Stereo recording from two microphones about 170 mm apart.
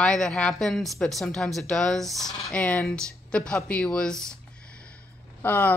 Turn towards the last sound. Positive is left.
turn(degrees=10)  # may be behind; listen again after turning